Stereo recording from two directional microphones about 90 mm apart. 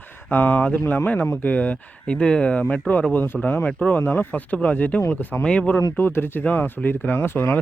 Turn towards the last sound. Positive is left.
turn(degrees=25)  # may be behind; listen again after turning